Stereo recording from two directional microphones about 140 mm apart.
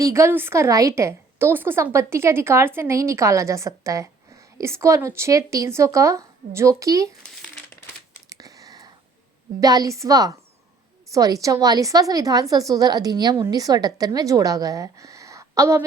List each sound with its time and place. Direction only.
0.0 s a woman's voice: 20° right (ahead or behind)
8.3 s a sound: 25° right (ahead or behind)
9.6 s a woman's voice: 25° right (ahead or behind)